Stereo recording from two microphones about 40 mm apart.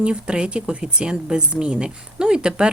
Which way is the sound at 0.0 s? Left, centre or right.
Right.